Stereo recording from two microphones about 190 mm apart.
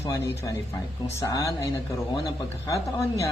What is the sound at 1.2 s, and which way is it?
Speech, 15° left (ahead or behind).